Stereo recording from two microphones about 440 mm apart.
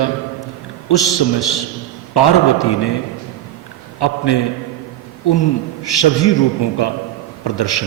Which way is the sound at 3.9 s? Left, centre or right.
Left.